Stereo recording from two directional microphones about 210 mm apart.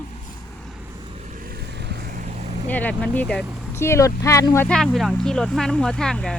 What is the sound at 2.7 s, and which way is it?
Speech, 5° left (ahead or behind).